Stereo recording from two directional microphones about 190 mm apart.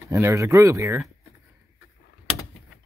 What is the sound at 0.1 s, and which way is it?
Speech, 15° right (ahead or behind).